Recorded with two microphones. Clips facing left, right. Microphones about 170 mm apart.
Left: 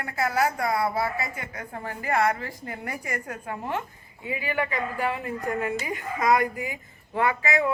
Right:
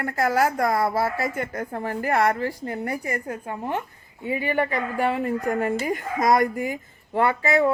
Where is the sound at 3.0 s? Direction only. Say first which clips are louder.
Right 4 dB; 30° right (ahead or behind).